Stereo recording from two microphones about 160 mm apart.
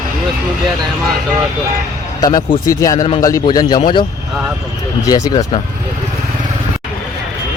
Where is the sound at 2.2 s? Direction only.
25° left (ahead or behind).